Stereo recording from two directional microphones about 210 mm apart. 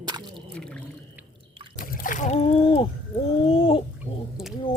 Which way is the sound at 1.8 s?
40° left (ahead or behind).